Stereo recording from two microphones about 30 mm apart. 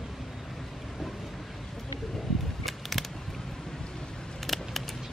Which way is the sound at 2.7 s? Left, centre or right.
Centre.